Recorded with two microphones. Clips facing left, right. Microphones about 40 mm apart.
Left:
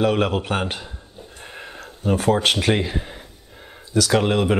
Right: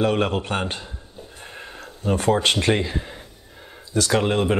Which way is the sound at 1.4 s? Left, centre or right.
Left.